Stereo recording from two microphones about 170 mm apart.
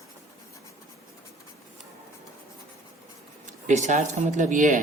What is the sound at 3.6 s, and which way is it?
Speech, 45° right (ahead or behind).